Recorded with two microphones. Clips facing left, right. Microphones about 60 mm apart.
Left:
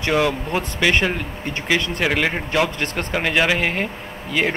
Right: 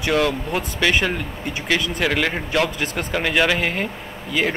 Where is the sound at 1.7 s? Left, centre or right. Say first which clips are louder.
Left 1 dB; centre.